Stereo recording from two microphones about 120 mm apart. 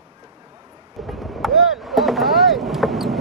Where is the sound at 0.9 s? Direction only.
Centre (ahead or behind).